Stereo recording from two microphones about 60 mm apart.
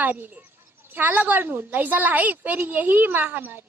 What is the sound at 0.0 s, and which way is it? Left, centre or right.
A woman's voice, right.